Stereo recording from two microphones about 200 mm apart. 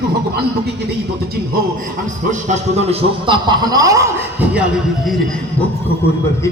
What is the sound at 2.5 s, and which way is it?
A man's voice, 30° right (ahead or behind).